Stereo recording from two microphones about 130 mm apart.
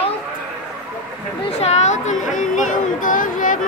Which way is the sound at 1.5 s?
60° left (ahead or behind).